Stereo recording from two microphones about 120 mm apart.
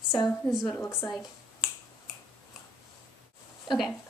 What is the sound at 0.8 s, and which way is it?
Speech, 25° left (ahead or behind).